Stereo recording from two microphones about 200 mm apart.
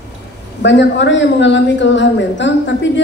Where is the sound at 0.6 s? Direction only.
65° left (ahead or behind).